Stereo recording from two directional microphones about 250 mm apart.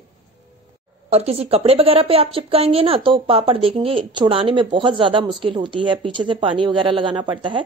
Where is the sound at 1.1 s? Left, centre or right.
Right.